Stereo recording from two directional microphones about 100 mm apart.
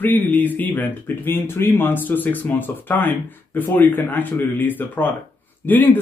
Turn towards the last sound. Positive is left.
turn(degrees=15)  # may be behind; listen again after turning